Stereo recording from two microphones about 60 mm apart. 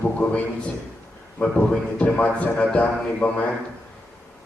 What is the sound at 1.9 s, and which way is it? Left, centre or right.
A man's voice, left.